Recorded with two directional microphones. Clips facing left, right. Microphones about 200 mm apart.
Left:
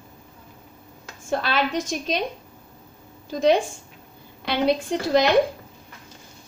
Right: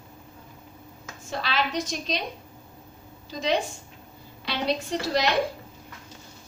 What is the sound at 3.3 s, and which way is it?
A woman's voice, 50° left (ahead or behind).